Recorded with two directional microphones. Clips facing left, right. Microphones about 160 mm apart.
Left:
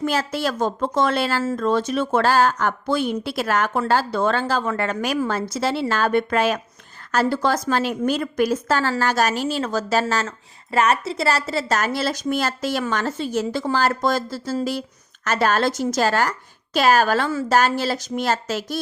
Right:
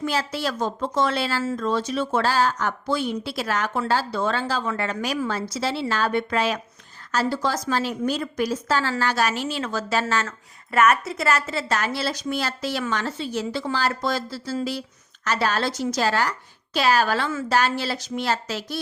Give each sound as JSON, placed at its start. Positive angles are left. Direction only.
{"t": 0.0, "sound": "speech", "side_deg": 50}